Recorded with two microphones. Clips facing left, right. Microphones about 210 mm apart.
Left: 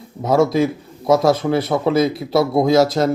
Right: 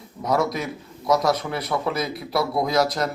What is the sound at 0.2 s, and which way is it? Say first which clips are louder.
Speech: left 8 dB; 25° left (ahead or behind).